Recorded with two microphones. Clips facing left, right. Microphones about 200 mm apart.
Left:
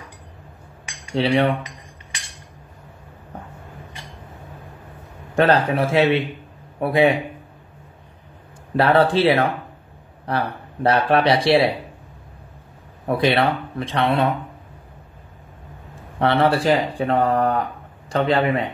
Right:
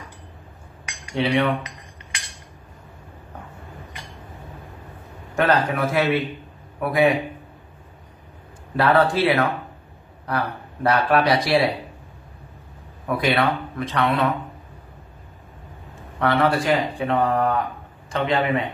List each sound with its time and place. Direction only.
0.8 s cutlery: 30° left (ahead or behind)
5.3 s speech: 30° left (ahead or behind)
8.7 s speech: 30° left (ahead or behind)
13.0 s speech: 30° left (ahead or behind)
16.2 s speech: 30° left (ahead or behind)